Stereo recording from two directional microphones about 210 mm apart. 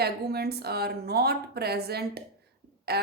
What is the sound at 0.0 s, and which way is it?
A woman's voice, 50° right (ahead or behind).